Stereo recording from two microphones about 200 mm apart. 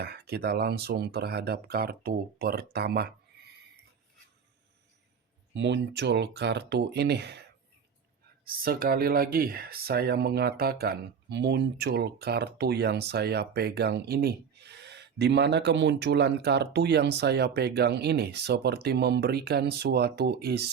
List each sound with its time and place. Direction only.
0.0 s speech: 50° right (ahead or behind)
5.5 s speech: 60° right (ahead or behind)
8.4 s speech: 50° right (ahead or behind)